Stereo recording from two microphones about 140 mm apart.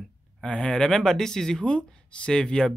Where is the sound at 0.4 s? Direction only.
5° left (ahead or behind).